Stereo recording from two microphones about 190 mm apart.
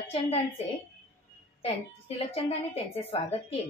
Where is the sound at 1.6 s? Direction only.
30° left (ahead or behind).